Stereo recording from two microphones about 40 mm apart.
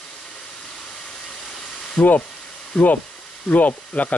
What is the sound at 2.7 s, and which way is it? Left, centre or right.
Speech, centre.